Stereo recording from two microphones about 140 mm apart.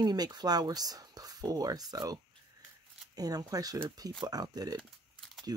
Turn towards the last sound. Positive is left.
turn(degrees=0)  # may be behind; listen again after turning